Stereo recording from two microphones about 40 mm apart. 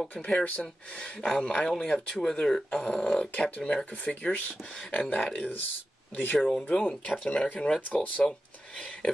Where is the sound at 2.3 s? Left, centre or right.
Left.